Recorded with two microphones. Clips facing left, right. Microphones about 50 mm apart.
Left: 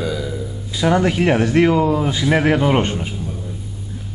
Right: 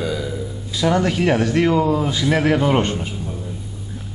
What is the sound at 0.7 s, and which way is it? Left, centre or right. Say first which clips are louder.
Speech: left 2 dB; centre.